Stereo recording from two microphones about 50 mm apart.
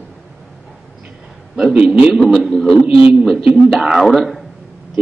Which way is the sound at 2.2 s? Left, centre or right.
Centre.